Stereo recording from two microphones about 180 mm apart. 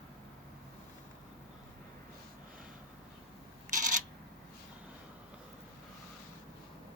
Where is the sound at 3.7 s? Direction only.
45° right (ahead or behind).